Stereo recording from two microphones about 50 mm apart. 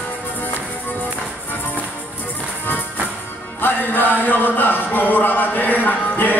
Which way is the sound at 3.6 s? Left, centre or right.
Left.